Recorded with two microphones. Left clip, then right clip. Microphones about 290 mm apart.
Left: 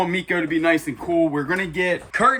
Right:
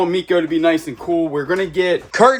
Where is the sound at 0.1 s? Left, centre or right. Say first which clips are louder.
Right 5 dB; right.